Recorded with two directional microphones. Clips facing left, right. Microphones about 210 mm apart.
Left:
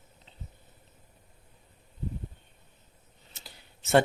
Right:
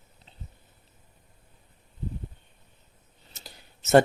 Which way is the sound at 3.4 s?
40° right (ahead or behind).